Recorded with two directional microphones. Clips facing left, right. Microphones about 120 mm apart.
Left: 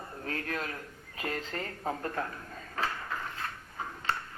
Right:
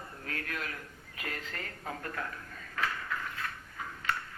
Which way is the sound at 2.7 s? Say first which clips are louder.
Left 1 dB; 30° left (ahead or behind).